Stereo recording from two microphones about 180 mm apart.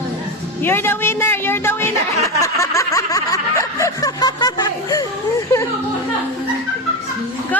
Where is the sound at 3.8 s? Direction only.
20° left (ahead or behind).